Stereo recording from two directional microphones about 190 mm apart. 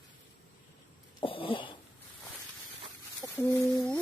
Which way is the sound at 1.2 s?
30° left (ahead or behind).